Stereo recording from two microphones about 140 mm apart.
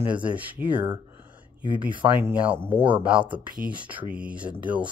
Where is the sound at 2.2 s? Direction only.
15° right (ahead or behind).